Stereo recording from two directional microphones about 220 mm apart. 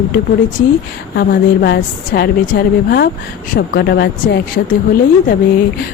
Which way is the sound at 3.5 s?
45° left (ahead or behind).